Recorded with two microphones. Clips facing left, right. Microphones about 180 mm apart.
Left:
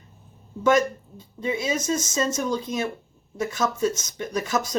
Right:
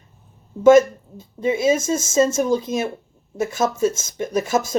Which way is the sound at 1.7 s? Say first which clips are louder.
Right 6 dB; 25° right (ahead or behind).